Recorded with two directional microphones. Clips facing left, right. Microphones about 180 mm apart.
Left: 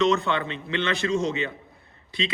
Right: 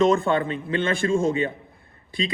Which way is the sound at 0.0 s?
50° right (ahead or behind).